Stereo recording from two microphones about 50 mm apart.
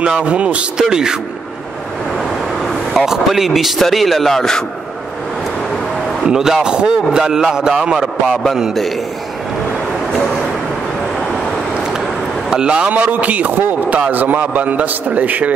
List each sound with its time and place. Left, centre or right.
0.0 s speech: right
3.1 s a man's voice: centre
6.2 s a man's voice: centre
12.4 s a man's voice: centre
13.0 s a man's voice: right